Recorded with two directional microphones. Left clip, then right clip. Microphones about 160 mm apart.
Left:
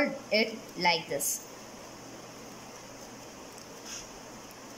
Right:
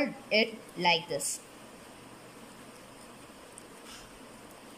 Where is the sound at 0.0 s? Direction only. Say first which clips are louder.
Even; 5° right (ahead or behind).